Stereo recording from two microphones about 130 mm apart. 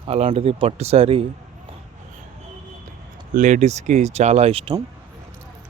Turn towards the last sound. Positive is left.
turn(degrees=-45)  # may be behind; listen again after turning